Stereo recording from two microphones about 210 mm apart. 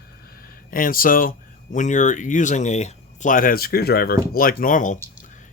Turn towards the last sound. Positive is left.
turn(degrees=40)  # may be behind; listen again after turning